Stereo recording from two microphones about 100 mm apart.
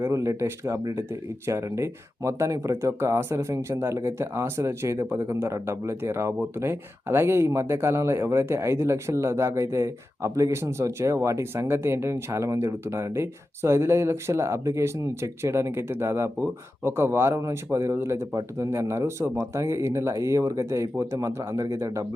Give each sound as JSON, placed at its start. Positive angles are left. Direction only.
{"t": 0.0, "sound": "speech", "side_deg": -30}